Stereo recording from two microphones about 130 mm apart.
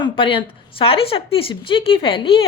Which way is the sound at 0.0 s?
40° left (ahead or behind).